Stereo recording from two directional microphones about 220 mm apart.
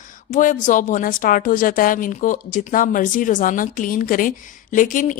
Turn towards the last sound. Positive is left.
turn(degrees=35)  # may be behind; listen again after turning